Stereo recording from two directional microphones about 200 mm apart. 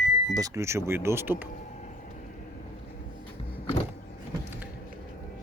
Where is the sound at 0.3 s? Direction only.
15° right (ahead or behind).